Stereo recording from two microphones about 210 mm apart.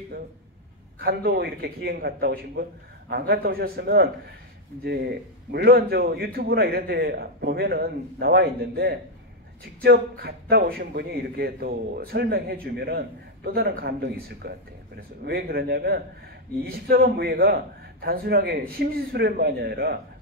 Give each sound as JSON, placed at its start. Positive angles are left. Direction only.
{"t": 0.9, "sound": "a man's voice", "side_deg": -45}
{"t": 5.5, "sound": "a man's voice", "side_deg": -50}
{"t": 15.2, "sound": "a man's voice", "side_deg": -50}